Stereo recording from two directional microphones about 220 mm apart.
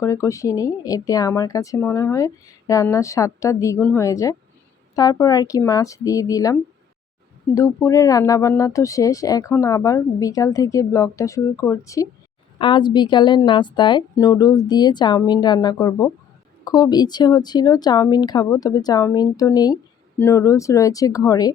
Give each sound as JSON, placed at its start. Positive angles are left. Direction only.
{"t": 0.0, "sound": "a woman's voice", "side_deg": 15}